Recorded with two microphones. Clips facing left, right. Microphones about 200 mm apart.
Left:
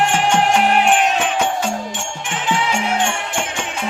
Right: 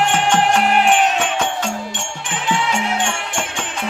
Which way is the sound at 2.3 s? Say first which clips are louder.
Even; centre (ahead or behind).